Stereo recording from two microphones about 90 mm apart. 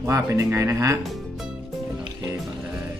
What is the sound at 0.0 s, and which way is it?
Speech, 35° right (ahead or behind).